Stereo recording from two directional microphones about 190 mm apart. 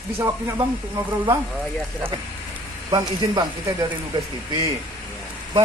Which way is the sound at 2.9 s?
20° right (ahead or behind).